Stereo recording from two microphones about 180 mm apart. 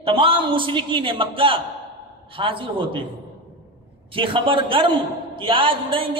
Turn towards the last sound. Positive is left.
turn(degrees=-30)  # may be behind; listen again after turning